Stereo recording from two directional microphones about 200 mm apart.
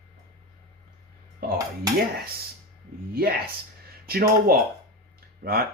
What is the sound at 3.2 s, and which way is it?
Speech, 50° right (ahead or behind).